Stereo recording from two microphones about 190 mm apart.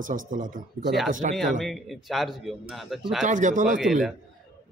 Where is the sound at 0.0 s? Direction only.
45° right (ahead or behind).